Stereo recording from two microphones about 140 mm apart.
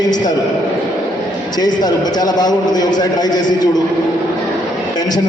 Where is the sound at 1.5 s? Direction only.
30° left (ahead or behind).